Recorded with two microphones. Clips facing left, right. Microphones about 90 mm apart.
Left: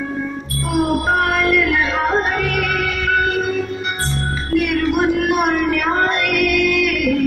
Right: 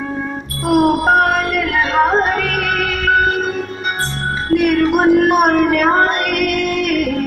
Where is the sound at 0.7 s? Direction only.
45° right (ahead or behind).